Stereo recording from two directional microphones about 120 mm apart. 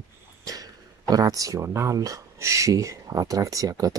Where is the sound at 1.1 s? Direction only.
30° right (ahead or behind).